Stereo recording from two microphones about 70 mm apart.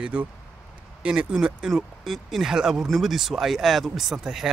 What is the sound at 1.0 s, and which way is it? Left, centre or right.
Speech, centre.